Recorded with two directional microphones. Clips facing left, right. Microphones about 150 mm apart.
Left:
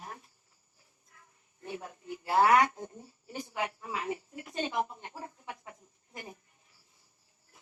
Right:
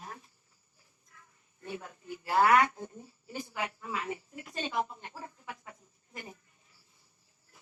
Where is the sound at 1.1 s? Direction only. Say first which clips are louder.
Right 1 dB; 30° left (ahead or behind).